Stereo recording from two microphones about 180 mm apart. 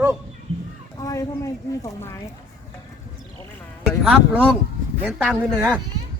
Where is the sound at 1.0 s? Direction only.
20° left (ahead or behind).